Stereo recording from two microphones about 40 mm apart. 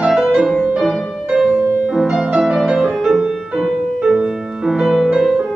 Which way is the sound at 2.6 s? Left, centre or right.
Centre.